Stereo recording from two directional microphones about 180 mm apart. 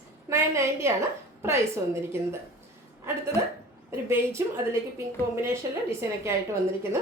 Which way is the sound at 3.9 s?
15° right (ahead or behind).